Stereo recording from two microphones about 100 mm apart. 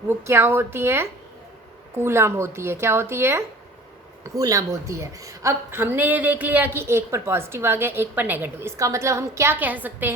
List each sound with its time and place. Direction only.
0.1 s a woman's voice: 25° right (ahead or behind)
4.4 s a woman's voice: 35° right (ahead or behind)
9.6 s a woman's voice: 15° right (ahead or behind)